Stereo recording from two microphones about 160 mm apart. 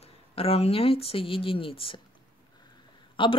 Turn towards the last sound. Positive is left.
turn(degrees=30)  # may be behind; listen again after turning